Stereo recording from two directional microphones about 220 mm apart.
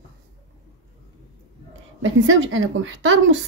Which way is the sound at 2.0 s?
60° right (ahead or behind).